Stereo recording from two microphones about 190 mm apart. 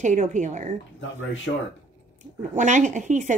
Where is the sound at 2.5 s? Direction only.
40° right (ahead or behind).